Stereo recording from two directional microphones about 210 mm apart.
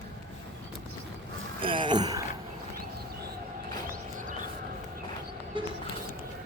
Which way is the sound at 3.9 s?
40° right (ahead or behind).